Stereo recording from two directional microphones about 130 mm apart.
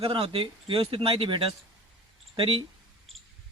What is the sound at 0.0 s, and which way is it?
A man's voice, 45° right (ahead or behind).